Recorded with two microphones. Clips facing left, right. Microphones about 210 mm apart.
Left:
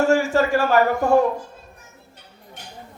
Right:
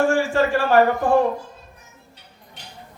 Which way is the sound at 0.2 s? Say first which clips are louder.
Even; 40° left (ahead or behind).